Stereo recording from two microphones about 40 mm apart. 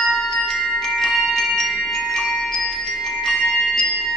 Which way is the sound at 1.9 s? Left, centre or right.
Centre.